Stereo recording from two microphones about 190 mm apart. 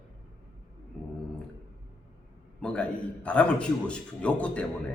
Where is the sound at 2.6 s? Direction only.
5° left (ahead or behind).